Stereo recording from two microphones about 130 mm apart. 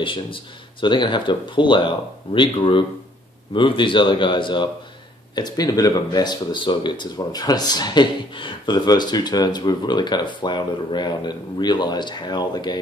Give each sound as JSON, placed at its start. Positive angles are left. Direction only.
{"t": 0.0, "sound": "speech", "side_deg": 40}